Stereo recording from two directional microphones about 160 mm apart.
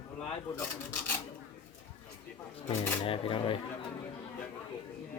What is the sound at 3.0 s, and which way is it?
Speech, 35° left (ahead or behind).